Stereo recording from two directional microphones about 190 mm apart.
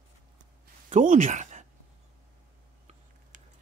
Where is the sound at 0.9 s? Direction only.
45° right (ahead or behind).